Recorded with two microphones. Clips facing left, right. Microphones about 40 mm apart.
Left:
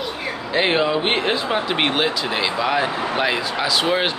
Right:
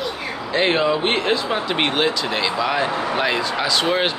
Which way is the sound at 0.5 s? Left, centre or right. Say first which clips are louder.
Even; centre.